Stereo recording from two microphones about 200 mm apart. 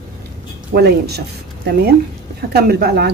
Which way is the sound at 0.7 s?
50° right (ahead or behind).